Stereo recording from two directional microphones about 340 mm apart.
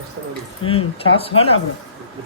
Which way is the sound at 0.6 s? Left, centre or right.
Centre.